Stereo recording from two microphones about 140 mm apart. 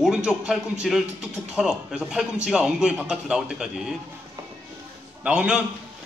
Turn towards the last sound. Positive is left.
turn(degrees=-10)  # may be behind; listen again after turning